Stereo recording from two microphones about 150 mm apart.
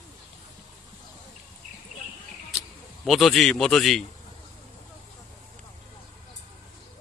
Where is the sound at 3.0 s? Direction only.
Centre (ahead or behind).